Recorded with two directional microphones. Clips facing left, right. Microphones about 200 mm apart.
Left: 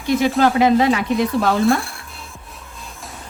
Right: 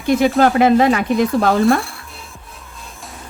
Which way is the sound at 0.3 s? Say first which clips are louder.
Right 1 dB; 50° right (ahead or behind).